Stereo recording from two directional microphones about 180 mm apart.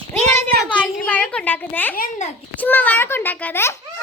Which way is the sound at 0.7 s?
5° left (ahead or behind).